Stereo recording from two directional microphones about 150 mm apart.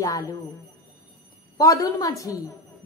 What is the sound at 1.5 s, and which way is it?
Speech, 20° left (ahead or behind).